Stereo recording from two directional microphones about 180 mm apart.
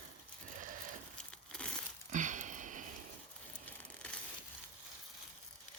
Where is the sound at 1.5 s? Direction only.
5° left (ahead or behind).